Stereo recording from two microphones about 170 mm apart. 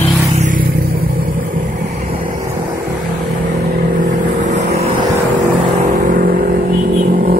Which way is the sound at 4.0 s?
45° right (ahead or behind).